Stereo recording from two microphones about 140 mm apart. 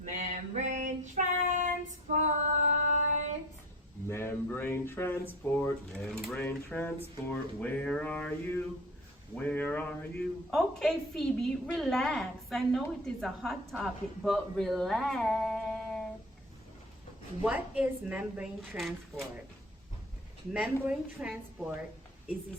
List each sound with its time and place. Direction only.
0.0 s child singing: 60° right (ahead or behind)
4.1 s a sound: 15° left (ahead or behind)
5.9 s a woman's voice: 5° left (ahead or behind)
7.3 s a sound: 10° left (ahead or behind)
10.5 s a woman's voice: centre (ahead or behind)
17.4 s a woman's voice: 10° right (ahead or behind)
18.6 s a woman's voice: centre (ahead or behind)
20.5 s a woman's voice: 10° right (ahead or behind)